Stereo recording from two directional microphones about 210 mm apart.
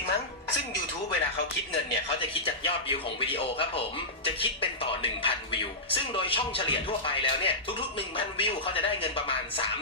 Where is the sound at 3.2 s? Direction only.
25° left (ahead or behind).